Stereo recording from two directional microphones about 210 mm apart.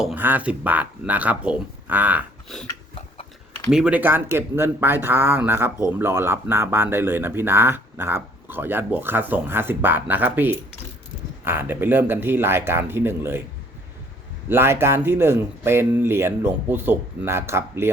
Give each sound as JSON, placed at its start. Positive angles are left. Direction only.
{"t": 0.0, "sound": "speech", "side_deg": -10}
{"t": 2.6, "sound": "a sound", "side_deg": 25}
{"t": 3.7, "sound": "speech", "side_deg": -5}
{"t": 14.5, "sound": "speech", "side_deg": -10}